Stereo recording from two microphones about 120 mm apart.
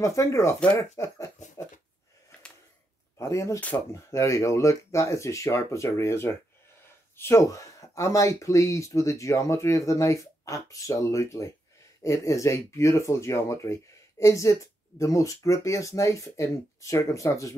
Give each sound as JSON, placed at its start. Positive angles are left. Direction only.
{"t": 0.0, "sound": "speech", "side_deg": 25}
{"t": 3.2, "sound": "speech", "side_deg": 25}